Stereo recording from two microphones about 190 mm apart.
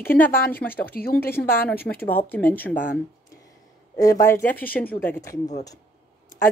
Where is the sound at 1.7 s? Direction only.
10° left (ahead or behind).